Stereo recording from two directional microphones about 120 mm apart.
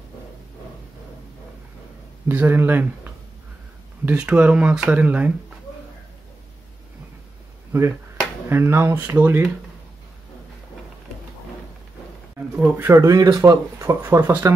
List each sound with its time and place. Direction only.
2.2 s speech: 20° right (ahead or behind)
8.5 s speech: 20° right (ahead or behind)
12.5 s speech: 15° right (ahead or behind)